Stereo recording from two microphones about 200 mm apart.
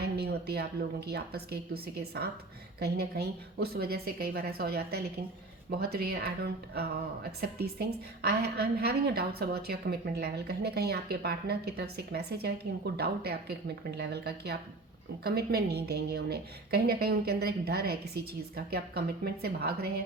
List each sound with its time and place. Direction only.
0.0 s a woman's voice: 55° right (ahead or behind)